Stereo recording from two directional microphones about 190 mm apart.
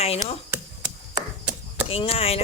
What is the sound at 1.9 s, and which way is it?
Speech, 30° left (ahead or behind).